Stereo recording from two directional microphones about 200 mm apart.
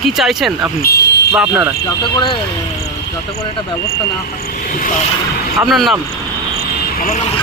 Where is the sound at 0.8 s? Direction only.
50° left (ahead or behind).